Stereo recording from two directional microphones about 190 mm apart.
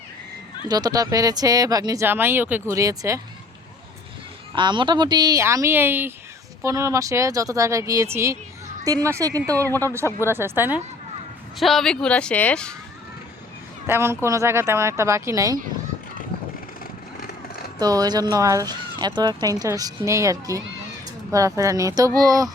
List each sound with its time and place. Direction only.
0.7 s speech: 20° right (ahead or behind)
4.5 s speech: 25° right (ahead or behind)
10.1 s speech: 15° left (ahead or behind)
10.3 s speech: 10° right (ahead or behind)
11.6 s speech: centre (ahead or behind)
13.8 s speech: 10° right (ahead or behind)
16.8 s vehicle: 55° left (ahead or behind)
17.7 s speech: 20° right (ahead or behind)